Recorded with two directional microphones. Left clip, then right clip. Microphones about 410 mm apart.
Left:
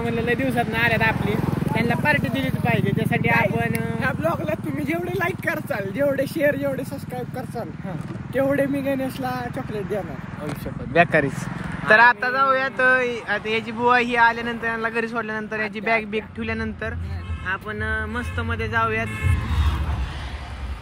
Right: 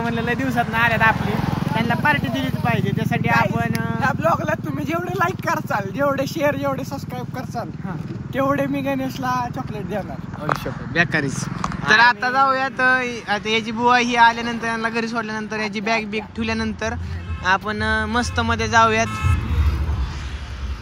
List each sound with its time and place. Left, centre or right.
0.1 s speech: centre
1.1 s speech: right
2.4 s speech: centre
5.9 s speech: centre
8.4 s speech: centre
10.9 s speech: centre